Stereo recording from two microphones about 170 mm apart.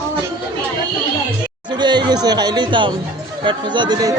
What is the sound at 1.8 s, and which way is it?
Speech, 25° right (ahead or behind).